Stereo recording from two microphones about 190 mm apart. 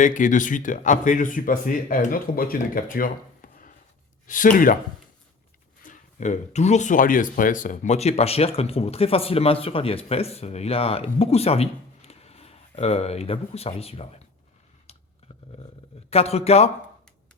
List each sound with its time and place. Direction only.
0.0 s speech: 40° left (ahead or behind)
5.8 s speech: 40° left (ahead or behind)
16.0 s speech: 30° left (ahead or behind)